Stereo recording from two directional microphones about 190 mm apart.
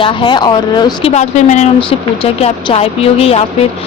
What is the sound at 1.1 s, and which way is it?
A woman's voice, 35° left (ahead or behind).